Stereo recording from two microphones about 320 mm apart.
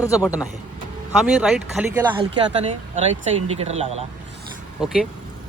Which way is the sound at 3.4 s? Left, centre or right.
Centre.